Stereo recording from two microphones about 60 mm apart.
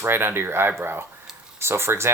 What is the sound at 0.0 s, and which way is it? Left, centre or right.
Speech, right.